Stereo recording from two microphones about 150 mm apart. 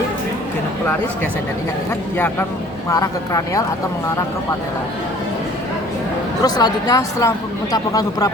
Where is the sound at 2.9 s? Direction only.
20° left (ahead or behind).